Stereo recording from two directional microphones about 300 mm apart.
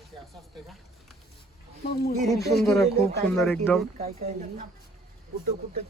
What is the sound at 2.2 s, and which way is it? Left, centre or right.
Speech, centre.